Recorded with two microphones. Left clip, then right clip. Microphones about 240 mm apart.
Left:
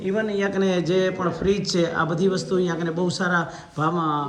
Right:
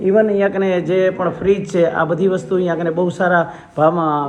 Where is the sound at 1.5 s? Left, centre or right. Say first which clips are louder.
Right 8 dB; left.